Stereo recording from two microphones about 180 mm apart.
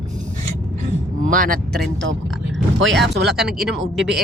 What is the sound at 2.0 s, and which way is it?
Speech, 90° right.